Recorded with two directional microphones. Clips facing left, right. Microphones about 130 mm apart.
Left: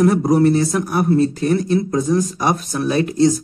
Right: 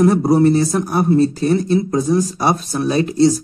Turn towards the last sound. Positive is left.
turn(degrees=-30)  # may be behind; listen again after turning